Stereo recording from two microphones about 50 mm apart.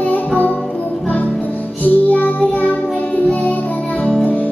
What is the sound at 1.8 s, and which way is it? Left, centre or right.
Music, left.